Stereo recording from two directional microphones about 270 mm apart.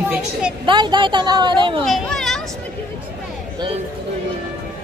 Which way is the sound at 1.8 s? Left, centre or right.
Centre.